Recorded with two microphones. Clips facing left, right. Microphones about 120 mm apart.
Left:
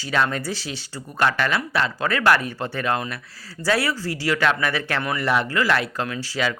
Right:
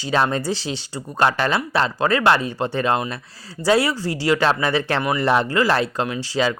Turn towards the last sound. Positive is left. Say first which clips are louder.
# right 4 dB
turn(degrees=-30)  # may be behind; listen again after turning